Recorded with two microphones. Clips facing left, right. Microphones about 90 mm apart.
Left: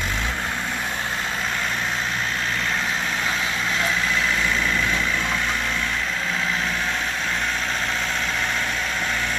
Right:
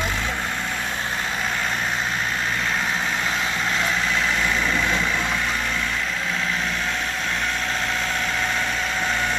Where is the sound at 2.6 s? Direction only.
5° right (ahead or behind).